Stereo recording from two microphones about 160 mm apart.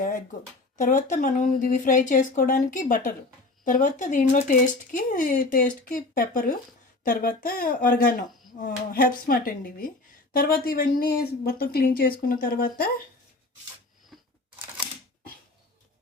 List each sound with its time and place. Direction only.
0.8 s speech: 50° left (ahead or behind)
14.1 s camera: centre (ahead or behind)